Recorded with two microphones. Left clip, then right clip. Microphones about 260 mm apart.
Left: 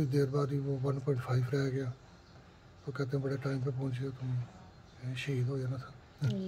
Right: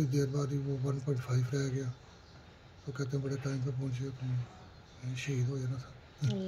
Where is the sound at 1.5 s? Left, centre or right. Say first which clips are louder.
Left 3 dB; left.